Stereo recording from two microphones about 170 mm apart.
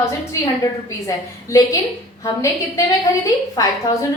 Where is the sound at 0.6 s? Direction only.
20° left (ahead or behind).